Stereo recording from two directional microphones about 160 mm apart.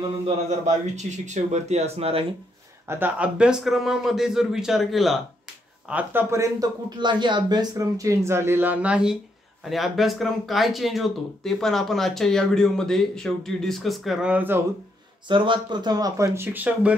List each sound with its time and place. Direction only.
0.7 s speech: 45° right (ahead or behind)
2.9 s speech: 10° right (ahead or behind)
15.2 s speech: 30° right (ahead or behind); by 16.9 s 10° right (ahead or behind)